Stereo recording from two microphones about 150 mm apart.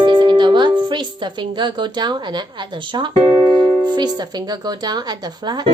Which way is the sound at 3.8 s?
30° right (ahead or behind).